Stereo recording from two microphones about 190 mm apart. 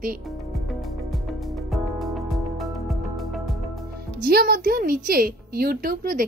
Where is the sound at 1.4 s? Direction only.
Centre (ahead or behind).